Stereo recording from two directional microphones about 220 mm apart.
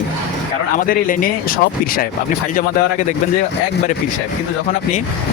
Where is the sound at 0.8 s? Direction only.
40° left (ahead or behind).